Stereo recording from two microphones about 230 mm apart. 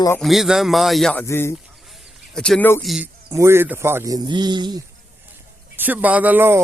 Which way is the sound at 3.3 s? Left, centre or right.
Centre.